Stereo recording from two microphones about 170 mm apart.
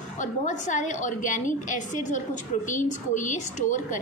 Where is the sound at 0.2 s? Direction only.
45° left (ahead or behind).